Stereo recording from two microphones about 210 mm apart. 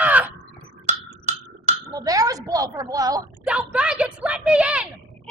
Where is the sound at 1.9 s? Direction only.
15° right (ahead or behind).